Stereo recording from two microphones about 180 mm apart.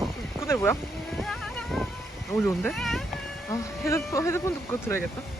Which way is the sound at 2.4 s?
Centre (ahead or behind).